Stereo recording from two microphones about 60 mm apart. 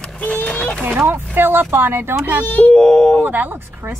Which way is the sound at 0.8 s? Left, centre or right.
Right.